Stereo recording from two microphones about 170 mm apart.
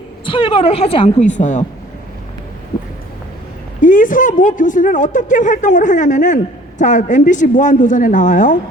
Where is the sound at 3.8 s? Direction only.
50° left (ahead or behind).